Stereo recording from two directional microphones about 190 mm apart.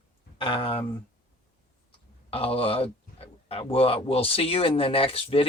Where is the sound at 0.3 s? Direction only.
30° left (ahead or behind).